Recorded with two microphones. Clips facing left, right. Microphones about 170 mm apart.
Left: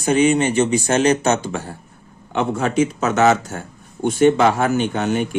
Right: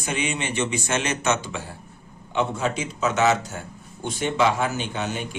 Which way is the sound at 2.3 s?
55° left (ahead or behind).